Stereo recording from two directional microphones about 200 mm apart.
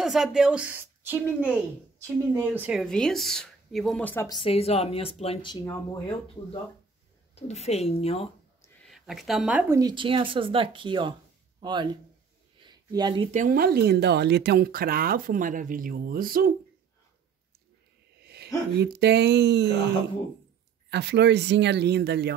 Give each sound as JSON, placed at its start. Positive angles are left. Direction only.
{"t": 0.0, "sound": "speech", "side_deg": 0}
{"t": 2.3, "sound": "speech", "side_deg": -10}
{"t": 4.4, "sound": "speech", "side_deg": 30}
{"t": 8.8, "sound": "speech", "side_deg": 0}
{"t": 12.6, "sound": "a sound", "side_deg": -20}
{"t": 13.3, "sound": "speech", "side_deg": -40}
{"t": 18.2, "sound": "a sound", "side_deg": -55}
{"t": 18.8, "sound": "speech", "side_deg": -55}
{"t": 20.9, "sound": "speech", "side_deg": -55}